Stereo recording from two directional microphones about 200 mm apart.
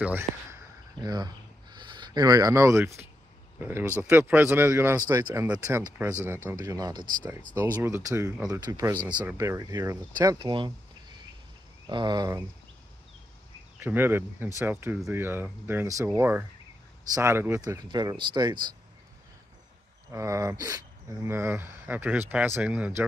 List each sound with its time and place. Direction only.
0.0 s speech: 10° right (ahead or behind)
13.7 s speech: 10° right (ahead or behind)
20.1 s speech: 15° right (ahead or behind)